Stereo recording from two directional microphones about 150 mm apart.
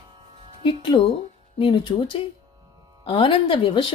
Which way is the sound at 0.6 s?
35° left (ahead or behind).